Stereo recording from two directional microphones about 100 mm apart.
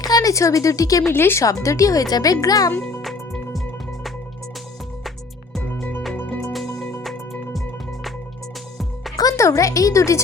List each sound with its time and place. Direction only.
0.0 s a woman's voice: 40° left (ahead or behind)
1.1 s speech: 25° left (ahead or behind)
3.0 s music: centre (ahead or behind)
6.1 s music: 20° left (ahead or behind)
7.0 s music: centre (ahead or behind)
9.1 s a woman's voice: 35° left (ahead or behind)